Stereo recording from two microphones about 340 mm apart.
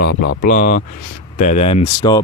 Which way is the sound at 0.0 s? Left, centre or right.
Left.